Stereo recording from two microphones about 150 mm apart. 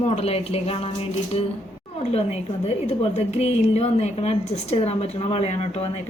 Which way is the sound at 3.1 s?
45° left (ahead or behind).